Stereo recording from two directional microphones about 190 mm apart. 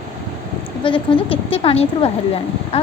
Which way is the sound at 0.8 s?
30° left (ahead or behind).